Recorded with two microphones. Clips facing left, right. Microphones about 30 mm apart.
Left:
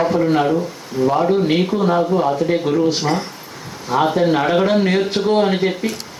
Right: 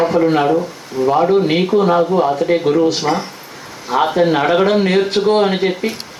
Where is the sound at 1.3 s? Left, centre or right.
Right.